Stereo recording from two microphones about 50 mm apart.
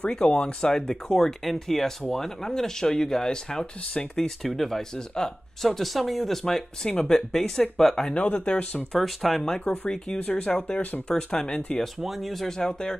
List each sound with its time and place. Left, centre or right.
0.1 s speech: centre
4.4 s speech: centre
5.7 s speech: centre
8.1 s speech: left
9.0 s speech: centre
9.8 s speech: left
10.4 s speech: centre
12.0 s speech: centre